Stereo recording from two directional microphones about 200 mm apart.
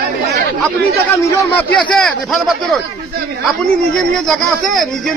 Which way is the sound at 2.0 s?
Centre (ahead or behind).